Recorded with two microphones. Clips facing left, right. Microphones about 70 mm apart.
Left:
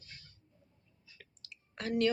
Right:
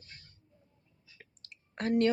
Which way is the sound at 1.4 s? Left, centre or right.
Right.